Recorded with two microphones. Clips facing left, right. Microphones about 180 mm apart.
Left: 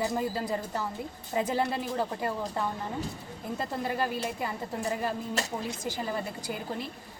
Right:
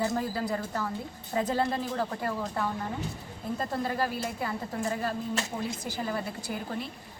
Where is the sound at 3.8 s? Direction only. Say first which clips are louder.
Left 2 dB; 15° left (ahead or behind).